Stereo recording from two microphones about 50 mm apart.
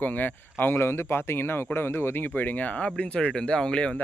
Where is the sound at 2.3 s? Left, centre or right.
Left; by 3.9 s centre.